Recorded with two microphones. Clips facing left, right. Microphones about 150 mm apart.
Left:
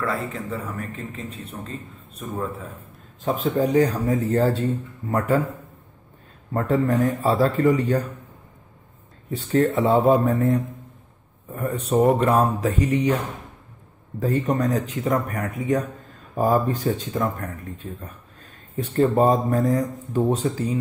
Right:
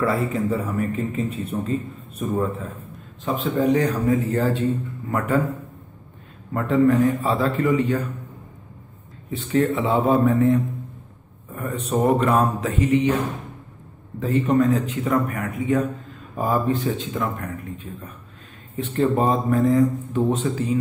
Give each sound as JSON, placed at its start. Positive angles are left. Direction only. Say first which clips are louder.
{"t": 0.0, "sound": "speech", "louder": "right 5 dB", "side_deg": -5}
{"t": 3.3, "sound": "a man's voice", "louder": "right 1 dB", "side_deg": 40}
{"t": 6.5, "sound": "a man's voice", "louder": "right 3 dB", "side_deg": 40}
{"t": 9.3, "sound": "a man's voice", "louder": "left 1 dB", "side_deg": 40}
{"t": 11.8, "sound": "a man's voice", "louder": "left 1 dB", "side_deg": 30}
{"t": 14.5, "sound": "a man's voice", "louder": "right 4 dB", "side_deg": 40}
{"t": 18.8, "sound": "a man's voice", "louder": "left 2 dB", "side_deg": 35}